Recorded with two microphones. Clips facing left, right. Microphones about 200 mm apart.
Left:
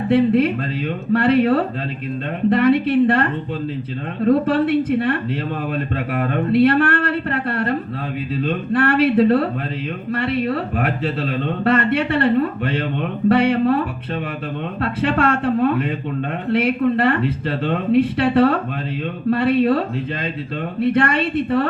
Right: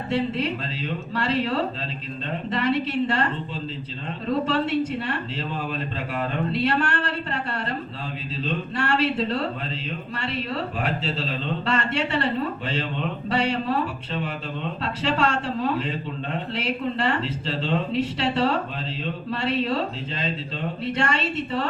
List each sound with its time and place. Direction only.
0.1 s speech: 55° left (ahead or behind)